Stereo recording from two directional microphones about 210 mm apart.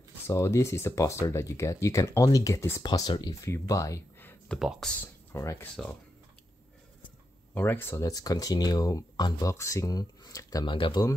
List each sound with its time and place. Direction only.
0.3 s speech: 15° left (ahead or behind)
5.0 s speech: 15° left (ahead or behind)
7.5 s speech: 10° left (ahead or behind)